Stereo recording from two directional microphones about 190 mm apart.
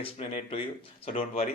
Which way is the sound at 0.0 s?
30° left (ahead or behind).